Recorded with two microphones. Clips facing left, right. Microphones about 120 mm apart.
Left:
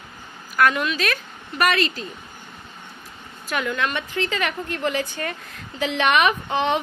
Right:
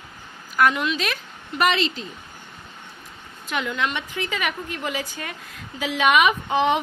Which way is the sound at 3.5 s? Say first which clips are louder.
Left 1 dB; 20° right (ahead or behind).